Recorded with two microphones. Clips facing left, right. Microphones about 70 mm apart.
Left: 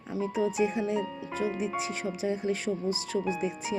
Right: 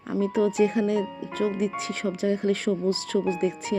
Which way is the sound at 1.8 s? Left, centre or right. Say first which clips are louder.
Right 4 dB; right.